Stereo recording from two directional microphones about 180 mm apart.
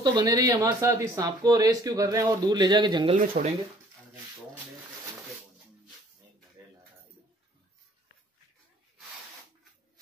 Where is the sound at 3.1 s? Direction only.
45° right (ahead or behind).